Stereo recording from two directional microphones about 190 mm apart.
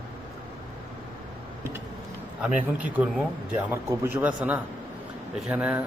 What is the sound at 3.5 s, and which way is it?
Speech, 10° right (ahead or behind).